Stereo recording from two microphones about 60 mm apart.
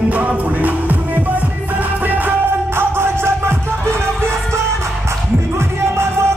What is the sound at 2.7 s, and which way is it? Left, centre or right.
Music, right.